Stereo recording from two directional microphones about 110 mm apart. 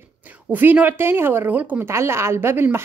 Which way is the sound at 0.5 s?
15° right (ahead or behind).